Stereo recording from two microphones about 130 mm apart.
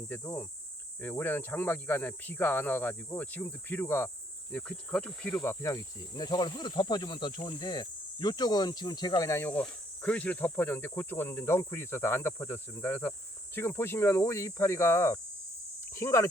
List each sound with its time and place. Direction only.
0.1 s speech: 15° left (ahead or behind)
4.5 s speech: 5° left (ahead or behind)
5.4 s cricket: 25° left (ahead or behind)
15.9 s speech: 25° left (ahead or behind)